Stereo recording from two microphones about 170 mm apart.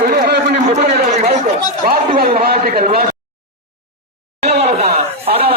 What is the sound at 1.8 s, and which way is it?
A man's voice, 55° right (ahead or behind).